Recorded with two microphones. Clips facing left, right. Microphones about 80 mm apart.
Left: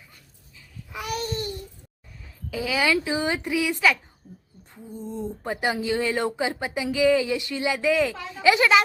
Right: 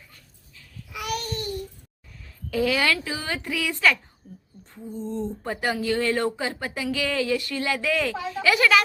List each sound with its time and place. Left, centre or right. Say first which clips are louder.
0.9 s babbling: left 1 dB; left
2.5 s speech: right 1 dB; centre
4.2 s a sound: right 2 dB; centre
4.7 s a woman's voice: right 3 dB; centre